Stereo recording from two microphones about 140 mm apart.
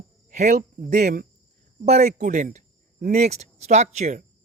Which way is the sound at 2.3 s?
80° right.